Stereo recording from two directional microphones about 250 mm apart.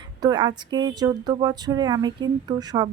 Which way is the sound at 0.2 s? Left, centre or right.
Centre.